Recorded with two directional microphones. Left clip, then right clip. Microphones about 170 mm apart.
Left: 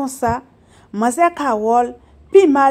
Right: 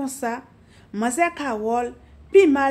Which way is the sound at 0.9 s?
35° left (ahead or behind).